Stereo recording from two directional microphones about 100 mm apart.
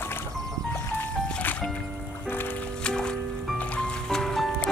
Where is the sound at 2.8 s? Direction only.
10° left (ahead or behind).